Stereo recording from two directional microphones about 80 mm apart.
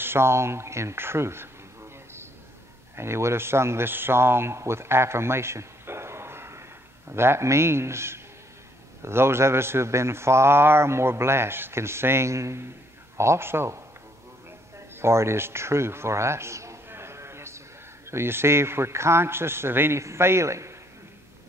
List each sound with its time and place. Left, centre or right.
0.0 s a man's voice: right
15.0 s a man's voice: right